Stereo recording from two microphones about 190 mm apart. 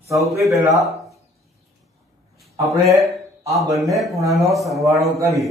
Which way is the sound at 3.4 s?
15° right (ahead or behind).